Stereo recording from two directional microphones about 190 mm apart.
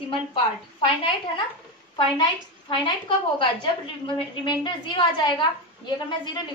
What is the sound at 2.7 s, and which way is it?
A woman's voice, 25° left (ahead or behind).